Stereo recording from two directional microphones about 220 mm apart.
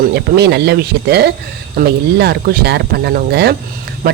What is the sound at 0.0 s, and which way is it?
Speech, 50° right (ahead or behind).